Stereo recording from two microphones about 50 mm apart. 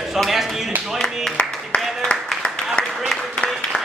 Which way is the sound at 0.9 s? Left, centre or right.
Centre.